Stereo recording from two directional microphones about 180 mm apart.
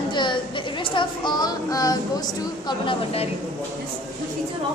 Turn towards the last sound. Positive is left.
turn(degrees=30)  # may be behind; listen again after turning